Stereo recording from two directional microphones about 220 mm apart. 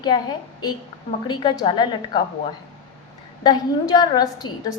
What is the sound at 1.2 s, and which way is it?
A woman's voice, 20° left (ahead or behind).